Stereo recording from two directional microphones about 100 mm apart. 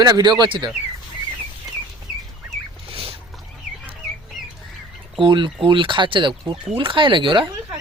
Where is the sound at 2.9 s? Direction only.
70° right (ahead or behind).